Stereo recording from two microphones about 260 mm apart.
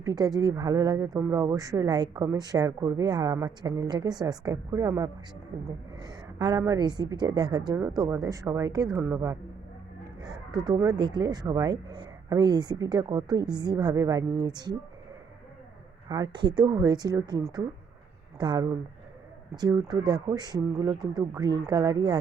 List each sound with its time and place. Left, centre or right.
0.0 s speech: centre
10.5 s speech: centre
16.0 s speech: centre